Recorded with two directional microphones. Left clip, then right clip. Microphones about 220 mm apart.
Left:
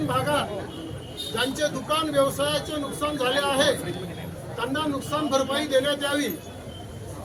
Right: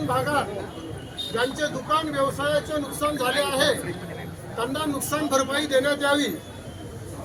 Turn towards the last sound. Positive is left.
turn(degrees=-15)  # may be behind; listen again after turning